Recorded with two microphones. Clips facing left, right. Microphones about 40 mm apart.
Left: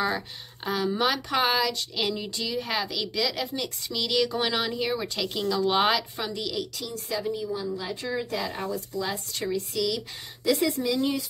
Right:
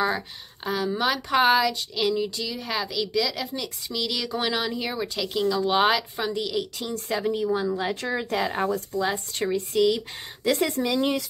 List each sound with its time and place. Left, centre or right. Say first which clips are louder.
0.7 s a woman's voice: right 1 dB; centre
2.0 s a woman's voice: right 6 dB; centre
6.8 s speech: right 3 dB; right
7.2 s speech: right 8 dB; right
7.9 s speech: right 3 dB; right
9.0 s speech: right 4 dB; right